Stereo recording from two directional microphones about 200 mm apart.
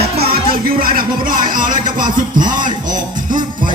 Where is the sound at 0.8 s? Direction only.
45° right (ahead or behind).